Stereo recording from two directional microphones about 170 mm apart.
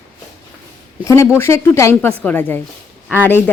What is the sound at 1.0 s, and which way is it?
Speech, 15° left (ahead or behind).